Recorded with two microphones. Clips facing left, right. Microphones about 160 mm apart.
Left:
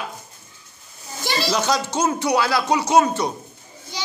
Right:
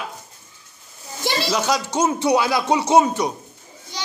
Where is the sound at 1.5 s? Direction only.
10° right (ahead or behind); by 3.1 s 25° right (ahead or behind).